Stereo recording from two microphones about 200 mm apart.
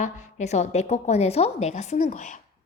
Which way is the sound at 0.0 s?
35° left (ahead or behind).